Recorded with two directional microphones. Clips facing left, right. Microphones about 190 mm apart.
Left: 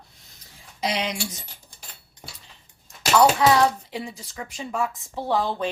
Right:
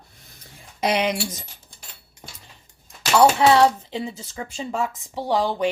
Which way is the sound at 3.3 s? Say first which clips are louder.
Right 3 dB; 25° right (ahead or behind).